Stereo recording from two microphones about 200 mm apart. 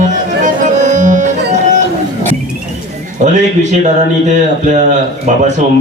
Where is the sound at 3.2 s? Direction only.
35° right (ahead or behind).